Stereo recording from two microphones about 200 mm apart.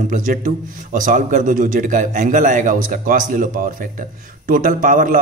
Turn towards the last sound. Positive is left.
turn(degrees=-40)  # may be behind; listen again after turning